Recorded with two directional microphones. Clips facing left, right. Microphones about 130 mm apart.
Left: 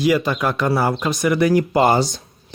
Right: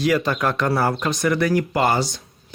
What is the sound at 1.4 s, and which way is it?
Speech, 20° left (ahead or behind).